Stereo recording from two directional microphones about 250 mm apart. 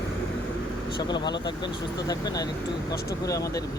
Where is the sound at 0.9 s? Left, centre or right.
Centre.